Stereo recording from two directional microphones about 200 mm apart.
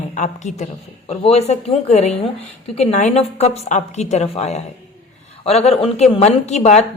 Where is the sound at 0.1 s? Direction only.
35° left (ahead or behind).